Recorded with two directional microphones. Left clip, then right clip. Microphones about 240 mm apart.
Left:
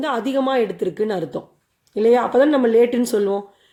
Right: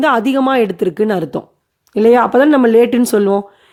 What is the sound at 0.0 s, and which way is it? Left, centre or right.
Speech, right.